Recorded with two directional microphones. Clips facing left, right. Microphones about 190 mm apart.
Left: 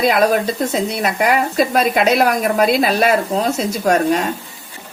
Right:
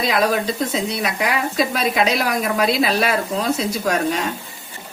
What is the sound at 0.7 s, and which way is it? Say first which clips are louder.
A woman's voice: left 3 dB; 50° left (ahead or behind).